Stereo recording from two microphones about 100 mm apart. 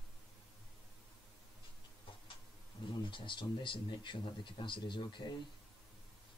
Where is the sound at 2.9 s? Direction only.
55° left (ahead or behind).